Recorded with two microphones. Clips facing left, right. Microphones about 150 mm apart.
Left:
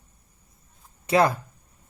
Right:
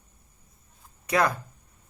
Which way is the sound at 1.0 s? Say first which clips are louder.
Left 4 dB; 30° left (ahead or behind).